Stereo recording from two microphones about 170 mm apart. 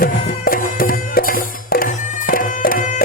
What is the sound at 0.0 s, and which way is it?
Music, 55° left (ahead or behind).